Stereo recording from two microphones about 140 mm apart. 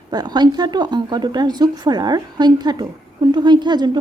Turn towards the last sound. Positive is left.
turn(degrees=-30)  # may be behind; listen again after turning